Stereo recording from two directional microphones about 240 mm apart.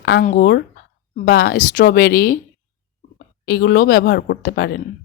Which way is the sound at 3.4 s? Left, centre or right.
Left.